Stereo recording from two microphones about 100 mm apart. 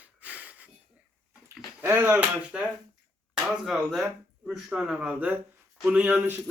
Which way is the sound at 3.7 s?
Centre (ahead or behind).